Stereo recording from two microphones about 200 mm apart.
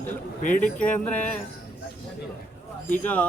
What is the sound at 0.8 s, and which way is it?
Music, 5° left (ahead or behind).